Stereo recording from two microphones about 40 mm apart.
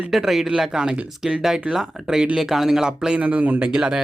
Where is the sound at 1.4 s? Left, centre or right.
Centre.